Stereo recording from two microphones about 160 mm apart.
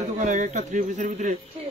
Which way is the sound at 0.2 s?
45° right (ahead or behind).